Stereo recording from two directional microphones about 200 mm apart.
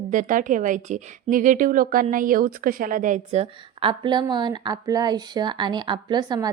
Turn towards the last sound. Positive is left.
turn(degrees=-20)  # may be behind; listen again after turning